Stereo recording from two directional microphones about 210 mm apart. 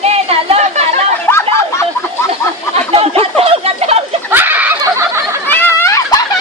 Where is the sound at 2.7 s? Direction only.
30° right (ahead or behind).